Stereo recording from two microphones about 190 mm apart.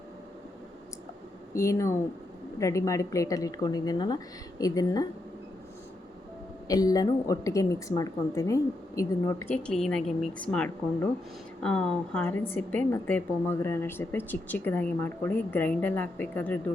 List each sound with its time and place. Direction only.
1.5 s a woman's voice: 15° left (ahead or behind)
6.7 s a woman's voice: 20° left (ahead or behind)